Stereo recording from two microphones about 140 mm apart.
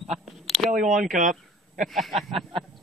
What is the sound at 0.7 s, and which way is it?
Speech, 65° right (ahead or behind).